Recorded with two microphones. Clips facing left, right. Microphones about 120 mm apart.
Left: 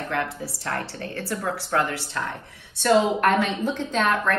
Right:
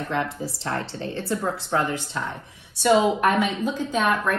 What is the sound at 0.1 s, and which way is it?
A woman's voice, 20° right (ahead or behind).